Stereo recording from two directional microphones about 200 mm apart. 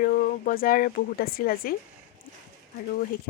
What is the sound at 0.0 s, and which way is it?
Speech, 45° left (ahead or behind).